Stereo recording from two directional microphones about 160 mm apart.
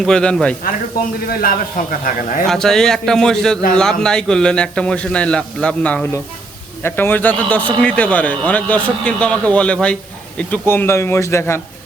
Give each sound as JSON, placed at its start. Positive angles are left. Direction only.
{"t": 0.0, "sound": "a man's voice", "side_deg": 5}
{"t": 1.3, "sound": "speech", "side_deg": 65}
{"t": 2.5, "sound": "a man's voice", "side_deg": 5}